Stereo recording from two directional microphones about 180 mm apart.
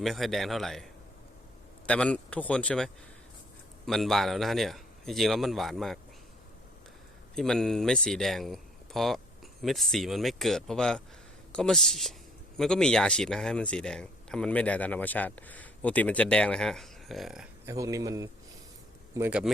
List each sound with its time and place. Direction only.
0.0 s speech: centre (ahead or behind)
1.9 s speech: 5° left (ahead or behind)
7.3 s a man's voice: 5° left (ahead or behind)
17.7 s a man's voice: 20° right (ahead or behind)